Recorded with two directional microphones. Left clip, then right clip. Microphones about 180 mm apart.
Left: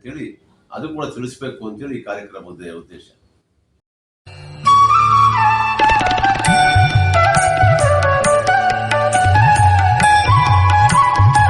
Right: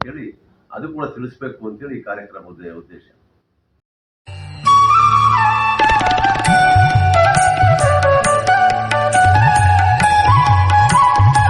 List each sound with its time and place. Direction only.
0.7 s speech: 15° left (ahead or behind)
4.3 s music: centre (ahead or behind)
5.1 s flute: centre (ahead or behind)